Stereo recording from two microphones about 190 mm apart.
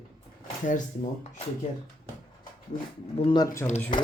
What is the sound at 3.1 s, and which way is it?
Speech, 25° left (ahead or behind).